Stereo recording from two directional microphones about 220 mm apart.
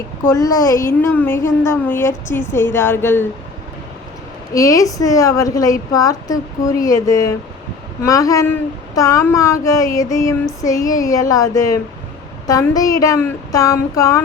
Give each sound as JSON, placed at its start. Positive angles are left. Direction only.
{"t": 0.3, "sound": "a woman's voice", "side_deg": 15}
{"t": 4.5, "sound": "a woman's voice", "side_deg": 15}